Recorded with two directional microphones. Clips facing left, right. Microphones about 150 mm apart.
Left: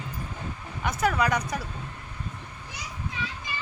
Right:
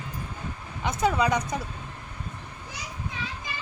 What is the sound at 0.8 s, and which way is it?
Speech, 20° right (ahead or behind).